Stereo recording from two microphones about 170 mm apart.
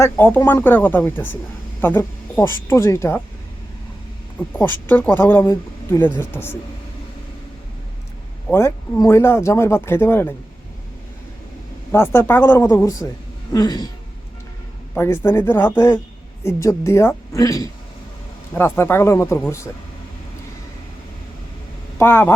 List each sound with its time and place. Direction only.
0.0 s speech: 15° left (ahead or behind)
4.5 s speech: 10° left (ahead or behind)
8.5 s speech: 15° left (ahead or behind)
11.9 s speech: 15° left (ahead or behind)
12.7 s a sound: 20° left (ahead or behind)
14.9 s speech: 15° left (ahead or behind)
21.9 s speech: 15° left (ahead or behind)